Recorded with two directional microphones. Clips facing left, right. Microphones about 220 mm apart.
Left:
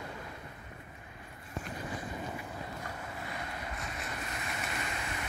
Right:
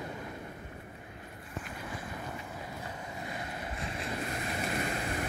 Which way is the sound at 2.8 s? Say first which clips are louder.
Right 1 dB; 15° right (ahead or behind).